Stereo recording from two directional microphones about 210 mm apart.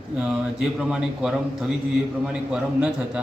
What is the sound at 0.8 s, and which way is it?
A woman's voice, 5° right (ahead or behind).